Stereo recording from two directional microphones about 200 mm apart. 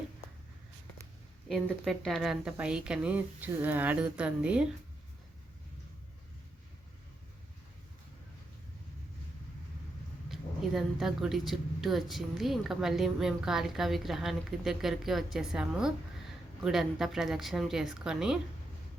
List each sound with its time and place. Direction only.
1.5 s speech: centre (ahead or behind)
10.2 s speech: centre (ahead or behind)